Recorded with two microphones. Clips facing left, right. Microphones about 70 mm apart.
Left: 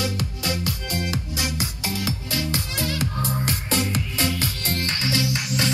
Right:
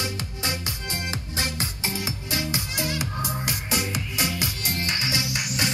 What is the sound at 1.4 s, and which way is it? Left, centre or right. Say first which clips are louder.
Music: left 1 dB; right.